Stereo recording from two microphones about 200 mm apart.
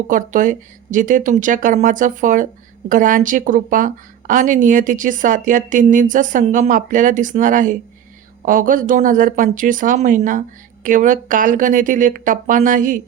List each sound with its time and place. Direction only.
0.1 s a woman's voice: 45° right (ahead or behind)